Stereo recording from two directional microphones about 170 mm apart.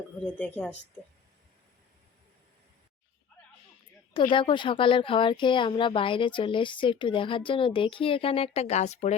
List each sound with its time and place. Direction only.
0.3 s speech: 5° left (ahead or behind)
4.3 s speech: 30° left (ahead or behind)